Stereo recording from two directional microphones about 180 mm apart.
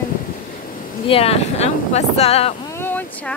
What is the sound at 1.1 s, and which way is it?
Speech, 35° left (ahead or behind).